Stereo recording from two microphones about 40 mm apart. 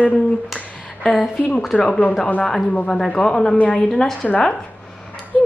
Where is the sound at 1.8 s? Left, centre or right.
Left.